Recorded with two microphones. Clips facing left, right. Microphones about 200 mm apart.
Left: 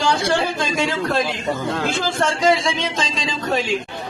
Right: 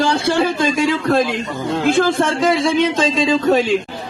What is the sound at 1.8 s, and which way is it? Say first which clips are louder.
A man's voice: right 9 dB; 55° right (ahead or behind).